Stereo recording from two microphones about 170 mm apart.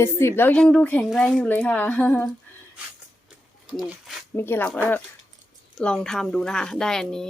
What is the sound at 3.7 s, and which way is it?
Speech, centre (ahead or behind).